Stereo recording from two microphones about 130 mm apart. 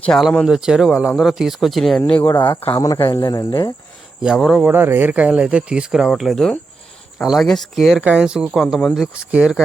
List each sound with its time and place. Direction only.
0.0 s speech: centre (ahead or behind)
2.2 s speech: 20° left (ahead or behind)
4.2 s speech: 5° right (ahead or behind)
4.6 s speech: 15° right (ahead or behind)